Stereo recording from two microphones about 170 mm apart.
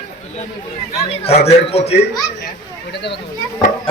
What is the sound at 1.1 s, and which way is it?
Speech, 35° left (ahead or behind).